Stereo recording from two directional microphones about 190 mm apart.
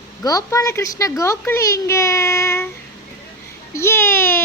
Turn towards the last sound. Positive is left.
turn(degrees=10)  # may be behind; listen again after turning